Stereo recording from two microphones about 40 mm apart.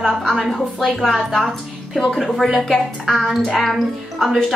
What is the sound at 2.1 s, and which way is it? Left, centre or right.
A woman's voice, centre.